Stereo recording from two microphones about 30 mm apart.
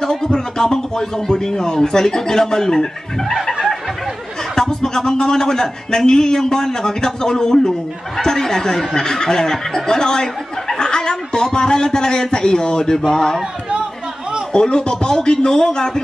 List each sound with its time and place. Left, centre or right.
0.0 s speech: centre
4.6 s a sound: centre
5.2 s speech: left
14.5 s speech: left